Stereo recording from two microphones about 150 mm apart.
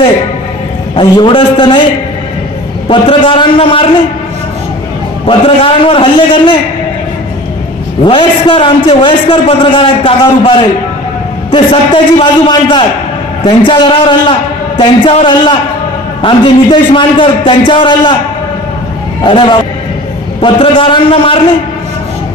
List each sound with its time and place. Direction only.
0.9 s a man's voice: 35° left (ahead or behind)
2.9 s a man's voice: 35° left (ahead or behind)
5.2 s a man's voice: 35° left (ahead or behind)
8.0 s a man's voice: 35° left (ahead or behind)
19.2 s a man's voice: 35° left (ahead or behind)